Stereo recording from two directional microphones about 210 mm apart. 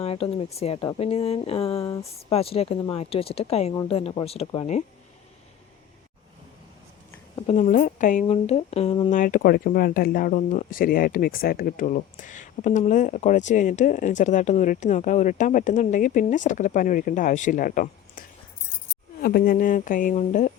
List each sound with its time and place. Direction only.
0.0 s speech: 30° left (ahead or behind)
1.8 s speech: 15° left (ahead or behind)
2.3 s speech: 30° left (ahead or behind)
7.3 s speech: 30° left (ahead or behind)